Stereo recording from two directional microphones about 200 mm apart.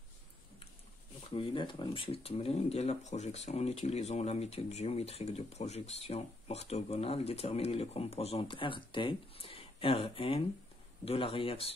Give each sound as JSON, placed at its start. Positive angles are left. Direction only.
{"t": 1.3, "sound": "a man's voice", "side_deg": 25}